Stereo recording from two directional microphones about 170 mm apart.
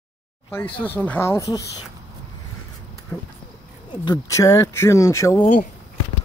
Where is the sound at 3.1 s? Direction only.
15° left (ahead or behind).